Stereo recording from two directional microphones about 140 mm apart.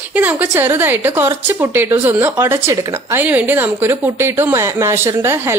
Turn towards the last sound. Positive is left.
turn(degrees=-20)  # may be behind; listen again after turning